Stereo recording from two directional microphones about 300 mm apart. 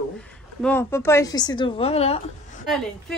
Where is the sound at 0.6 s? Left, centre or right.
Centre.